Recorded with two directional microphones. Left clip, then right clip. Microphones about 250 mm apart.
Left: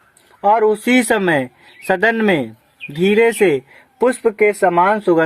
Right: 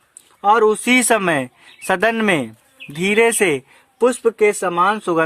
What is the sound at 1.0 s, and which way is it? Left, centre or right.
Speech, right.